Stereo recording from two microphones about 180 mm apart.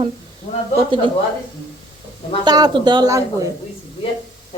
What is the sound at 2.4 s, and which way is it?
A woman's voice, 20° right (ahead or behind).